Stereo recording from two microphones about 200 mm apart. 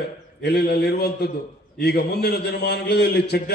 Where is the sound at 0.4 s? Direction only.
55° left (ahead or behind).